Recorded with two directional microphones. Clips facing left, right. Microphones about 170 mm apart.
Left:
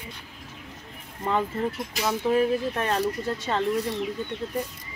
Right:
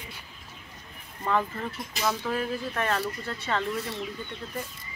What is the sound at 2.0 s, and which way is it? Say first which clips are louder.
Speech: left 6 dB; 20° left (ahead or behind).